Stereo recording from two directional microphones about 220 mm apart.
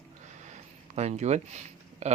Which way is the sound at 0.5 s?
30° right (ahead or behind).